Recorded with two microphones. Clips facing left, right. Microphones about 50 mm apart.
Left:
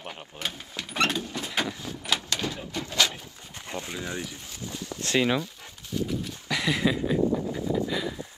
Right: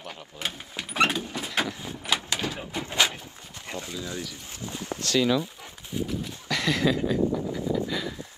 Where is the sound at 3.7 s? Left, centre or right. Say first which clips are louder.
Left 1 dB; left.